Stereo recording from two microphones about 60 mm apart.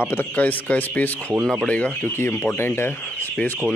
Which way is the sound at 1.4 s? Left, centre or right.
Centre.